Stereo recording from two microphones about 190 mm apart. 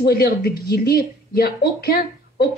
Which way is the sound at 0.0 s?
55° left (ahead or behind).